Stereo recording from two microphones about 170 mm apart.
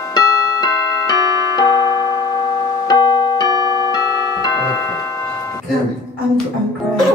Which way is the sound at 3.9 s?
20° left (ahead or behind).